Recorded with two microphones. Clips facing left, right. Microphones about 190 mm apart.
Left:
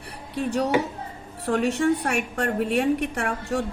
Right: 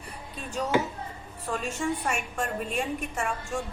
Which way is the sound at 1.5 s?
70° left (ahead or behind).